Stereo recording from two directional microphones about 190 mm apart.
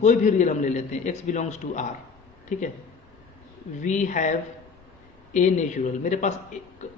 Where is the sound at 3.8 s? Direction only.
40° left (ahead or behind).